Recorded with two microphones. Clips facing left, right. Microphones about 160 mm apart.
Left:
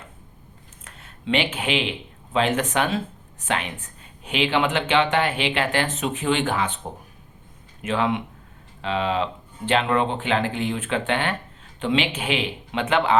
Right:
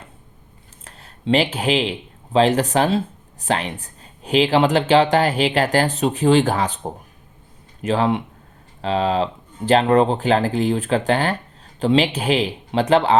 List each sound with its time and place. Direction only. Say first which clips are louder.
0.9 s speech: right 6 dB; 35° right (ahead or behind)